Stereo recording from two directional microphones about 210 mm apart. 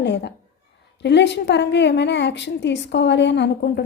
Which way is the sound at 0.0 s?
55° left (ahead or behind).